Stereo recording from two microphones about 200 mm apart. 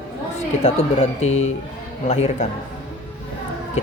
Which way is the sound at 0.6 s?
35° left (ahead or behind).